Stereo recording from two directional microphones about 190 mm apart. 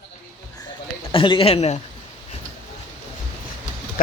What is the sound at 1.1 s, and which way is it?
Speech, 30° left (ahead or behind).